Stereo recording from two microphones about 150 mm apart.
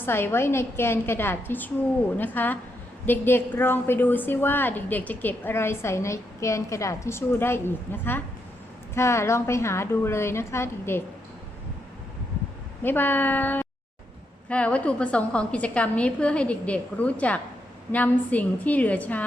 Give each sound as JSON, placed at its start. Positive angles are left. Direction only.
{"t": 0.0, "sound": "a woman's voice", "side_deg": 15}
{"t": 12.8, "sound": "a woman's voice", "side_deg": 15}